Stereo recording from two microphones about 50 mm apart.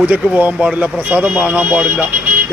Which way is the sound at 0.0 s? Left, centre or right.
Right.